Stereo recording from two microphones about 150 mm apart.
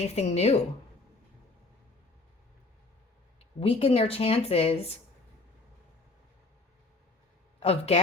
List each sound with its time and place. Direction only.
0.0 s speech: 50° left (ahead or behind)
3.6 s a woman's voice: 40° left (ahead or behind)
7.6 s a woman's voice: 40° left (ahead or behind)